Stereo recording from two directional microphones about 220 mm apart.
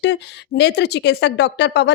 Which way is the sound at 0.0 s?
50° left (ahead or behind).